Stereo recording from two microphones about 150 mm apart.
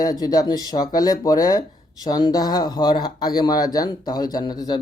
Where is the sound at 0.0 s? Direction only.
25° left (ahead or behind).